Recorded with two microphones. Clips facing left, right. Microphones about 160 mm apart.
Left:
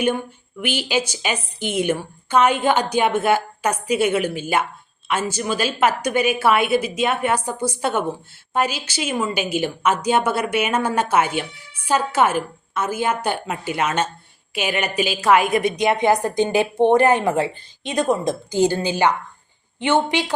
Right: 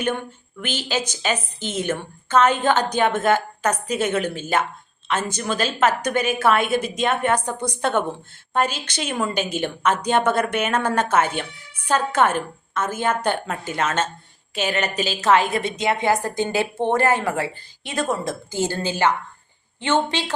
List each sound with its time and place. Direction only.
0.6 s a woman's voice: 10° left (ahead or behind)